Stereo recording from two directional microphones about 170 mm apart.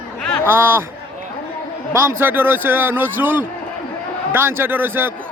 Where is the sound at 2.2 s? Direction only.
10° right (ahead or behind).